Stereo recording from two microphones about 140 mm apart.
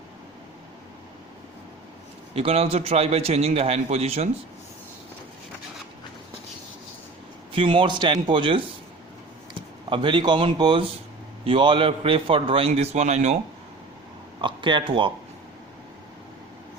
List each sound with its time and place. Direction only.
2.3 s a man's voice: 45° right (ahead or behind)
7.5 s a man's voice: 40° right (ahead or behind)
9.9 s a man's voice: 35° right (ahead or behind); by 13.4 s 55° right (ahead or behind)
14.4 s a man's voice: 35° right (ahead or behind)